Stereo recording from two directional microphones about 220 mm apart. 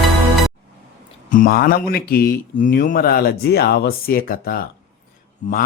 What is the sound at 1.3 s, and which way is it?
A man's voice, 40° left (ahead or behind).